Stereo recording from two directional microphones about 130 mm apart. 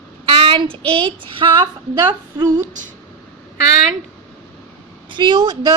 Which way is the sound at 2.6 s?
75° right (ahead or behind).